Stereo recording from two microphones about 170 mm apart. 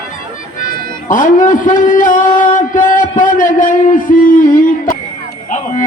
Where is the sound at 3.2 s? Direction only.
50° left (ahead or behind).